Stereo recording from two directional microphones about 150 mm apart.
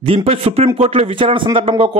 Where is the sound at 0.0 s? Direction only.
40° right (ahead or behind).